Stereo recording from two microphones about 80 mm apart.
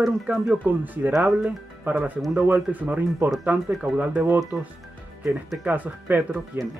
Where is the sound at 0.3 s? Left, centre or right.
Right.